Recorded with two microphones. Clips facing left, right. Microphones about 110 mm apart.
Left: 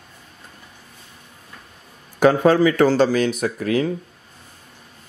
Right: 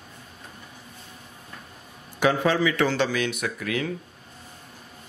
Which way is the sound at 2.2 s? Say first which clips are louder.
Left 7 dB; 45° left (ahead or behind).